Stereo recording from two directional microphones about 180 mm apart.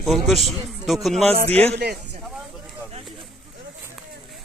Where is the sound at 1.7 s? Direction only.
65° right (ahead or behind).